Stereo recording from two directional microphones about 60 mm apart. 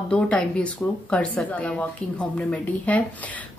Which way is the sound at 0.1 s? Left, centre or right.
Centre.